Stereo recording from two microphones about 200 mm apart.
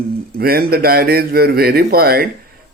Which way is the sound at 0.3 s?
50° right (ahead or behind).